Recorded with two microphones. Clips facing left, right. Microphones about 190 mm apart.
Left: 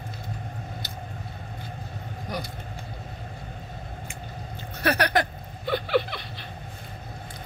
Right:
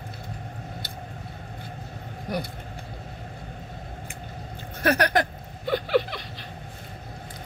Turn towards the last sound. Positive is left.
turn(degrees=-45)  # may be behind; listen again after turning